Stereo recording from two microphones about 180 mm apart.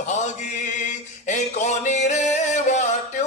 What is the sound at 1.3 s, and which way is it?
Music, 40° left (ahead or behind).